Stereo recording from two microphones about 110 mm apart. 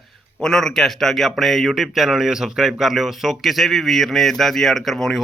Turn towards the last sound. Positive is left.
turn(degrees=0)  # may be behind; listen again after turning